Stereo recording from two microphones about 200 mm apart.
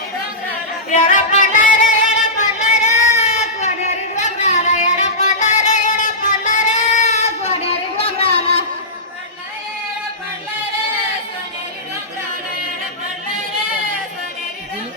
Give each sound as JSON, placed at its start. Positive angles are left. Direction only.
{"t": 0.9, "sound": "music", "side_deg": 40}